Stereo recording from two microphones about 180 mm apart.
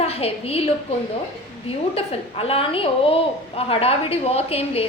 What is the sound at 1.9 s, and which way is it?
A woman's voice, 30° left (ahead or behind).